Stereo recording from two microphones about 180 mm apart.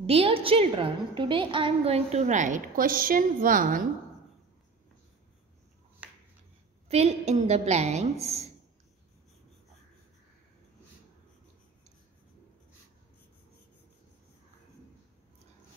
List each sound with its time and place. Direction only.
0.0 s a woman's voice: 30° right (ahead or behind); by 3.8 s 50° right (ahead or behind)
6.0 s finger snapping: 10° right (ahead or behind)
6.9 s a woman's voice: 40° right (ahead or behind)